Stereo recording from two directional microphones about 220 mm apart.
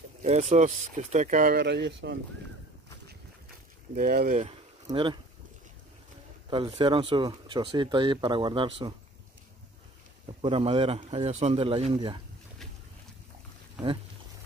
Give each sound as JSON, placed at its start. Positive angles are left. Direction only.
{"t": 0.2, "sound": "speech", "side_deg": -30}
{"t": 1.6, "sound": "speech", "side_deg": -50}
{"t": 3.9, "sound": "speech", "side_deg": -40}
{"t": 4.8, "sound": "speech", "side_deg": -20}
{"t": 6.5, "sound": "speech", "side_deg": -25}
{"t": 10.4, "sound": "speech", "side_deg": -25}